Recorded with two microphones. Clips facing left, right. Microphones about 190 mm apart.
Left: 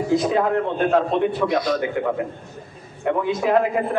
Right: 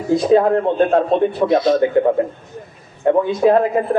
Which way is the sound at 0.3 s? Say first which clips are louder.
Right 7 dB; 35° right (ahead or behind).